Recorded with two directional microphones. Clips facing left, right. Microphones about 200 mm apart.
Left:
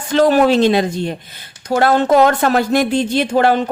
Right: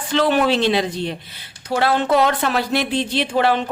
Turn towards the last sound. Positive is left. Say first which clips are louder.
# left 4 dB
turn(degrees=45)  # may be behind; listen again after turning